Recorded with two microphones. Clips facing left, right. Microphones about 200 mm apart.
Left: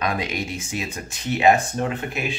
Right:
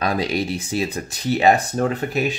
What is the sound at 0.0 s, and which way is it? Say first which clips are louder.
Speech: right 4 dB; 35° right (ahead or behind).